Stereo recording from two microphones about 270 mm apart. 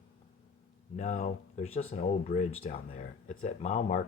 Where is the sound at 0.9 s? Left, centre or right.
Left.